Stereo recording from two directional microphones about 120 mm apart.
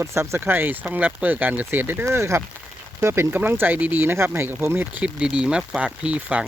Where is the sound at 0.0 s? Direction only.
25° right (ahead or behind).